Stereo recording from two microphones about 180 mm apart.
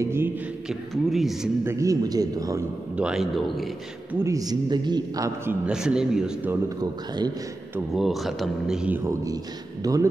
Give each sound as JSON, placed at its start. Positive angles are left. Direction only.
{"t": 0.0, "sound": "a man's voice", "side_deg": -15}
{"t": 0.7, "sound": "a man's voice", "side_deg": 0}
{"t": 1.6, "sound": "speech", "side_deg": -15}
{"t": 3.0, "sound": "a man's voice", "side_deg": -5}
{"t": 4.2, "sound": "a man's voice", "side_deg": -20}
{"t": 6.8, "sound": "speech", "side_deg": -20}
{"t": 7.9, "sound": "a man's voice", "side_deg": 0}